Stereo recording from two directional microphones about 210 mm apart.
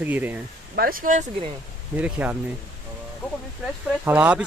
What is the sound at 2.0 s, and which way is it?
Speech, 10° right (ahead or behind).